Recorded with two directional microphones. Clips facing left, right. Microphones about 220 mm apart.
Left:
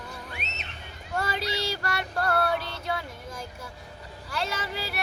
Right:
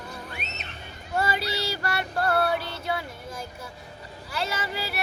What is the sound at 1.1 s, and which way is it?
Female singing, 5° right (ahead or behind).